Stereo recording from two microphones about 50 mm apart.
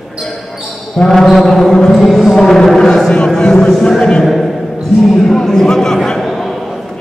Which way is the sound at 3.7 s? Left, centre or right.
Centre.